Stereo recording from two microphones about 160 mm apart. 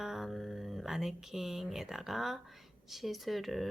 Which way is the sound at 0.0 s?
Centre (ahead or behind).